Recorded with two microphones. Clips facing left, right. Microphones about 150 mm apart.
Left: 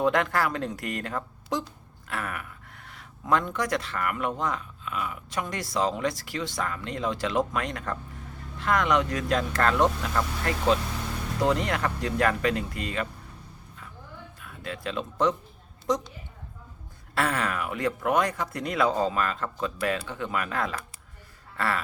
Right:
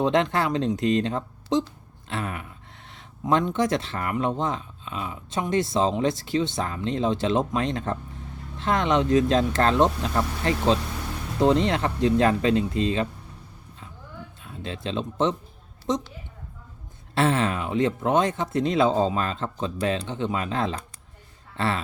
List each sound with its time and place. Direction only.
0.0 s speech: 25° right (ahead or behind)
14.4 s speech: 25° right (ahead or behind)
17.2 s speech: 25° right (ahead or behind)